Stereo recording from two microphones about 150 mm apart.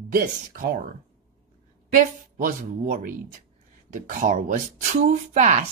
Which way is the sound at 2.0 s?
65° right (ahead or behind).